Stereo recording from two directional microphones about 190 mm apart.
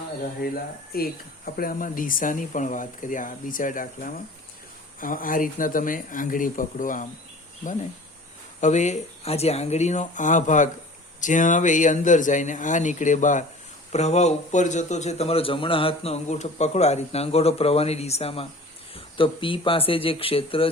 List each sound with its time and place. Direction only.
0.4 s speech: 50° left (ahead or behind)
8.6 s a man's voice: 40° left (ahead or behind)